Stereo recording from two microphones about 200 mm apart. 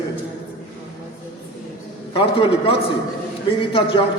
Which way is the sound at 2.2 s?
25° left (ahead or behind).